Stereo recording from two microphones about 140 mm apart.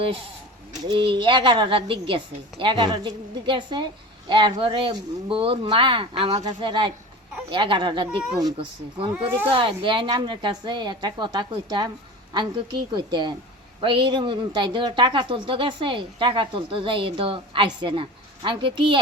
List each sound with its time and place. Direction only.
0.9 s speech: 35° right (ahead or behind)